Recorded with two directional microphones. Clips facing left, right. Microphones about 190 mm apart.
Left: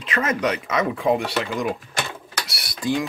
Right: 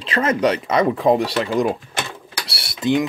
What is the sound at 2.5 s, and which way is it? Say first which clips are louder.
Typing: right 5 dB; 25° right (ahead or behind).